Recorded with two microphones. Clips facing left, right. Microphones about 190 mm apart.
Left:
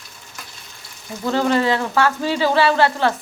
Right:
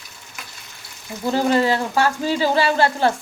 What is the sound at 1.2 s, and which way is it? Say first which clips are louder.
Frying: even; 10° right (ahead or behind).